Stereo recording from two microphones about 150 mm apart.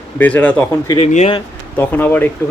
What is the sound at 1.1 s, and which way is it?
Speech, 50° left (ahead or behind).